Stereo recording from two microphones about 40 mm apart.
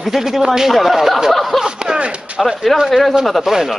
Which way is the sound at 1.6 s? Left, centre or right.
Centre.